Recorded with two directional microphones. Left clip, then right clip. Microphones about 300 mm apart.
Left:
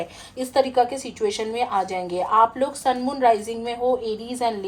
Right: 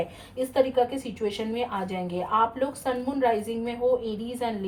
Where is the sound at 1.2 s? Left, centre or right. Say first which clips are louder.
Left 6 dB; left.